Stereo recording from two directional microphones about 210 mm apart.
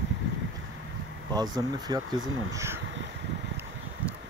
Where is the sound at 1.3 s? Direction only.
20° right (ahead or behind).